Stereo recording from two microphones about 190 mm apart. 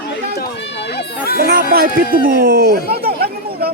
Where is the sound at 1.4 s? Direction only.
50° right (ahead or behind).